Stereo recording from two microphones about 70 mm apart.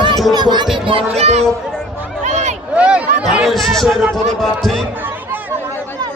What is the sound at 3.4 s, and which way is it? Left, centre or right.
A man's voice, centre.